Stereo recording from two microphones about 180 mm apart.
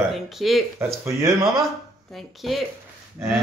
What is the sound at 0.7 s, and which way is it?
Speech, 15° right (ahead or behind).